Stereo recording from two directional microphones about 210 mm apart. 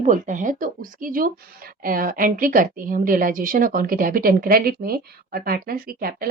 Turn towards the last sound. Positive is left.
turn(degrees=-45)  # may be behind; listen again after turning